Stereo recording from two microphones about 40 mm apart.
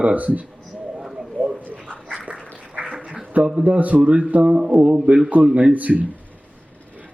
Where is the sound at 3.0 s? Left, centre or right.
Right.